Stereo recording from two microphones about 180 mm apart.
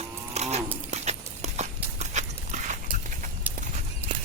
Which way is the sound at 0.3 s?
40° right (ahead or behind).